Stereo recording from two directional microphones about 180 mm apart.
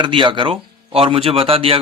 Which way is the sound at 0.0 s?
30° right (ahead or behind).